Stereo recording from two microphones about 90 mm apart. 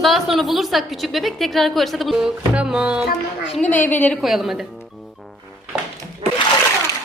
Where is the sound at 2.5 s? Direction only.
10° right (ahead or behind).